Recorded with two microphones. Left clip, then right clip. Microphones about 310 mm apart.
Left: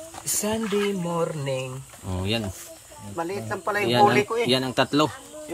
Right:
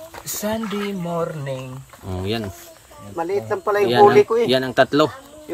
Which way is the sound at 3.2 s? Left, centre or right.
Right.